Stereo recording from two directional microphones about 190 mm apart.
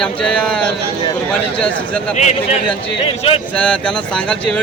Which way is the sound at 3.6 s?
5° left (ahead or behind).